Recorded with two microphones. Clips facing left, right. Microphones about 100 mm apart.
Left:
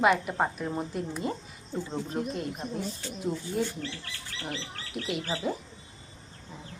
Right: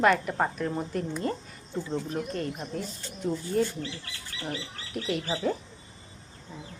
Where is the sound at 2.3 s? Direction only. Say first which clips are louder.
Right 1 dB; 10° left (ahead or behind).